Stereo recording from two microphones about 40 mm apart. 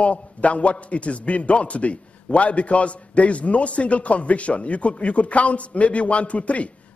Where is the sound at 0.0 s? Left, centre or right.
Left.